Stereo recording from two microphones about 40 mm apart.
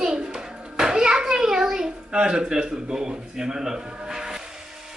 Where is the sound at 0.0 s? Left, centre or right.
Centre.